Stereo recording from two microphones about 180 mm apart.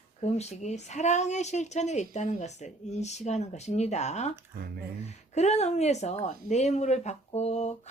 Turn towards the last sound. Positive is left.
turn(degrees=40)  # may be behind; listen again after turning